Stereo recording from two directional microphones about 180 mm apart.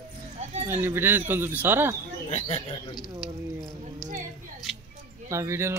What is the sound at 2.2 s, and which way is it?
Speech, 40° left (ahead or behind).